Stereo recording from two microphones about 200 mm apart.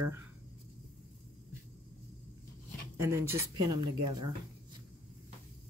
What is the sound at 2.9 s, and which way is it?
Speech, 15° right (ahead or behind).